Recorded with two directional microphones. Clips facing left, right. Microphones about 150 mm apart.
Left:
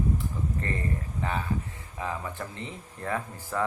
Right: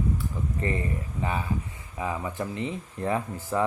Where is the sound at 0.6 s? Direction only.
15° right (ahead or behind).